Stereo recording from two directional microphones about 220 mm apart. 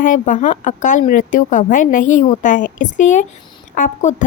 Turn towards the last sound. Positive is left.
turn(degrees=35)  # may be behind; listen again after turning